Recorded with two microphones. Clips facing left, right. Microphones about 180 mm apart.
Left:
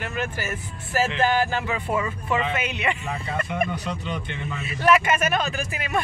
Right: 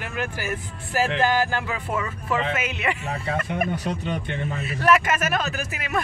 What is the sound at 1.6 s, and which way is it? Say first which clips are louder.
Speech: left 2 dB; centre (ahead or behind).